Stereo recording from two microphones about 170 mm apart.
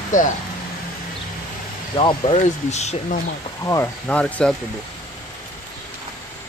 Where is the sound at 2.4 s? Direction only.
40° left (ahead or behind).